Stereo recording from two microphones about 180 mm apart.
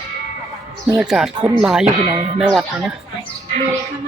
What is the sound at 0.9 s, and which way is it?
Speech, 5° right (ahead or behind).